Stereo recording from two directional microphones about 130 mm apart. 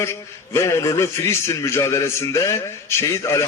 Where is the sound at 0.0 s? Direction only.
20° left (ahead or behind).